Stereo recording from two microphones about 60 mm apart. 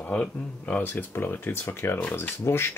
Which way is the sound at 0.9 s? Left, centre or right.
Left.